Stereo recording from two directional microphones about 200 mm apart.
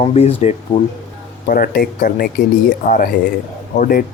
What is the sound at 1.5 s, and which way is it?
Speech, 45° left (ahead or behind).